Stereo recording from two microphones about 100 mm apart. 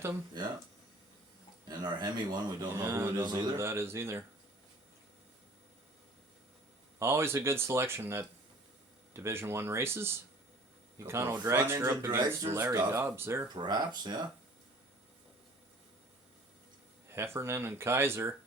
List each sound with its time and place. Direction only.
1.8 s speech: 45° right (ahead or behind)
2.9 s speech: 20° right (ahead or behind)
3.2 s speech: 45° right (ahead or behind)
3.6 s speech: 25° right (ahead or behind)
7.0 s speech: 25° right (ahead or behind)
12.0 s speech: 40° right (ahead or behind)
12.5 s speech: 20° right (ahead or behind)
13.6 s speech: 45° right (ahead or behind)
17.1 s speech: 25° right (ahead or behind)